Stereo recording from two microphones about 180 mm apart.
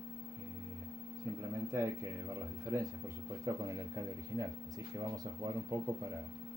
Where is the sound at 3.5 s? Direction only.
20° right (ahead or behind).